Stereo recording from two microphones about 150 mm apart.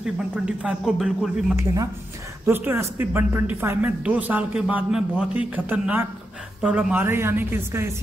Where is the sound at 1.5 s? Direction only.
25° right (ahead or behind).